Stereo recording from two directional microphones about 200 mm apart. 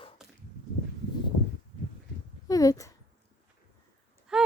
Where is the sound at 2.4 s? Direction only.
15° left (ahead or behind).